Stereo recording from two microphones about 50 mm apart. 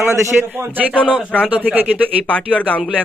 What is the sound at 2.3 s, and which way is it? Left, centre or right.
Speech, left.